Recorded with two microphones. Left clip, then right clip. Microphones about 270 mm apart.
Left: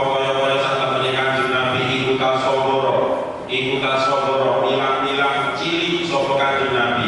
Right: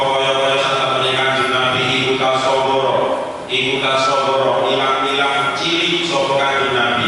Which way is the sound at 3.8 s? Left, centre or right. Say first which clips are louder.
Right 2 dB; centre.